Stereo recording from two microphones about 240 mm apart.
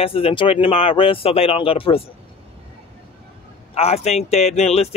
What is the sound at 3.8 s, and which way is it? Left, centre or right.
Speech, left.